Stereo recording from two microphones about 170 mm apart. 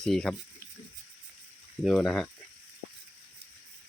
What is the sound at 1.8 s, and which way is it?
Speech, centre (ahead or behind).